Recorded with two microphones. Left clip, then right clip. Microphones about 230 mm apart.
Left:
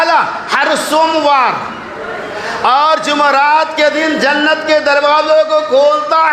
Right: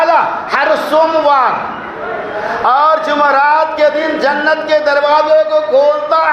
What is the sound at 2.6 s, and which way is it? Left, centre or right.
A man's voice, left.